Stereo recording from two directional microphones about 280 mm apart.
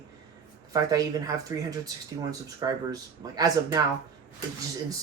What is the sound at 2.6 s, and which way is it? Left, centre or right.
Speech, centre.